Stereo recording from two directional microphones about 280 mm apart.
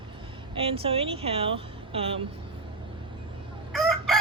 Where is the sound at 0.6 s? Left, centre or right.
Centre.